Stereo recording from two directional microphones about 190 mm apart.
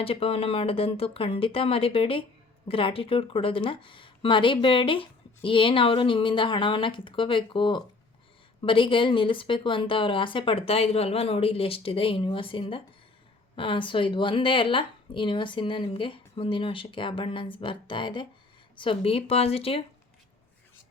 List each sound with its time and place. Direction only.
0.0 s speech: 30° left (ahead or behind)